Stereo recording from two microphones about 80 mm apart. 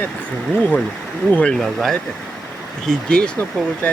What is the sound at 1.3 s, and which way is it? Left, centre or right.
Speech, centre.